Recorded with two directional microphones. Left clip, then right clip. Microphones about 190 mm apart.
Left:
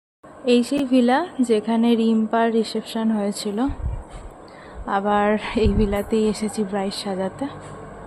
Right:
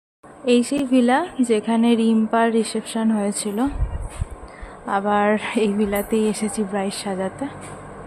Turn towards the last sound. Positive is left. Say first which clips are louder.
# even
turn(degrees=0)  # may be behind; listen again after turning